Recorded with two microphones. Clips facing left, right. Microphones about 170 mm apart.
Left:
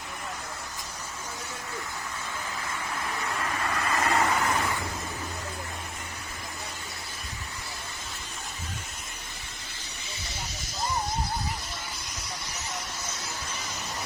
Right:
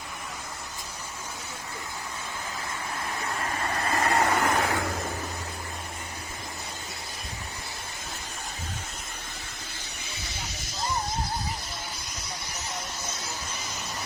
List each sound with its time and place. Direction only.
3.4 s vehicle: 35° right (ahead or behind)
3.8 s vehicle: 45° right (ahead or behind)